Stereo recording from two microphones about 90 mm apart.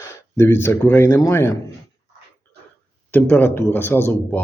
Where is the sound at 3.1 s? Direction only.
20° left (ahead or behind).